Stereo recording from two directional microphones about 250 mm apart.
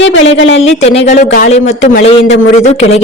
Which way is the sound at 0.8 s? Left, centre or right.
Left.